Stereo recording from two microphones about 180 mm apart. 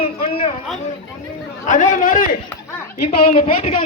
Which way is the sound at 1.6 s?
45° left (ahead or behind).